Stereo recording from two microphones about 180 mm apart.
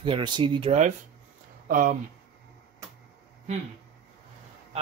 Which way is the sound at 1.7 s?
50° right (ahead or behind).